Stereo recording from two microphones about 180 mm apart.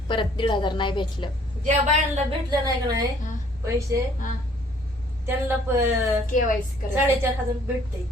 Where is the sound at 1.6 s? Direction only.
40° right (ahead or behind).